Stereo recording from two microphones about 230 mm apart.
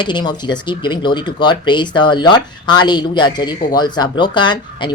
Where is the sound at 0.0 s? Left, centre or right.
Centre.